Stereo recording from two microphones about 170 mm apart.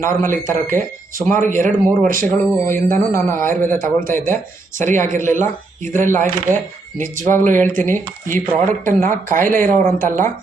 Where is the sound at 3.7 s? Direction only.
55° right (ahead or behind).